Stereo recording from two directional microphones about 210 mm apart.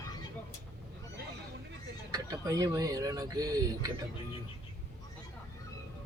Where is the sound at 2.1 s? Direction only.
15° right (ahead or behind).